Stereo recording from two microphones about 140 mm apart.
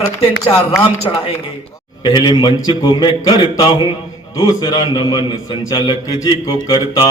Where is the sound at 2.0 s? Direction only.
35° left (ahead or behind).